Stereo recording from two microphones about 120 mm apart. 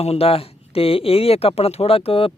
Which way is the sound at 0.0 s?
60° left (ahead or behind).